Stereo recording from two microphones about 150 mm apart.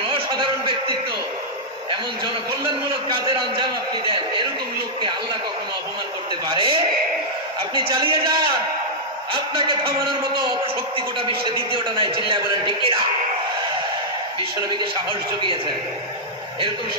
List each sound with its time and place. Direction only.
0.0 s a sound: 35° right (ahead or behind)
2.6 s a man's voice: 30° right (ahead or behind)
6.5 s a man's voice: 35° right (ahead or behind)